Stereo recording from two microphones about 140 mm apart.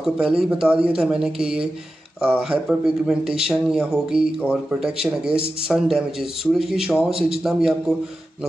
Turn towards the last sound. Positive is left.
turn(degrees=-5)  # may be behind; listen again after turning